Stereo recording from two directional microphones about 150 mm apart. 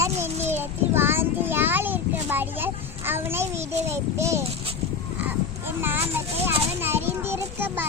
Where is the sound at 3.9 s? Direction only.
20° right (ahead or behind).